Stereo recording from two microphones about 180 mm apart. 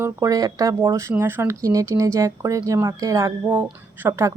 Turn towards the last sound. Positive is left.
turn(degrees=-15)  # may be behind; listen again after turning